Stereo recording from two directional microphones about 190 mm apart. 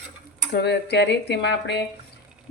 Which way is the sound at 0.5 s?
65° left (ahead or behind).